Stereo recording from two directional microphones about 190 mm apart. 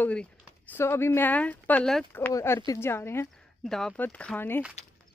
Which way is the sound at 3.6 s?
Centre (ahead or behind).